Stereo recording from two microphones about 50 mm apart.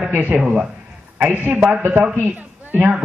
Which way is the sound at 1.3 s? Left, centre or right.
Right.